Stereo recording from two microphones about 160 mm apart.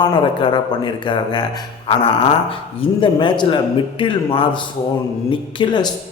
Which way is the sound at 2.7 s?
30° left (ahead or behind).